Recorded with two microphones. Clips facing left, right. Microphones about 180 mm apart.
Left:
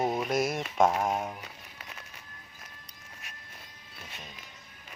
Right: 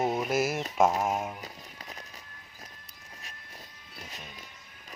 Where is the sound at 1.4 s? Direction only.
35° right (ahead or behind).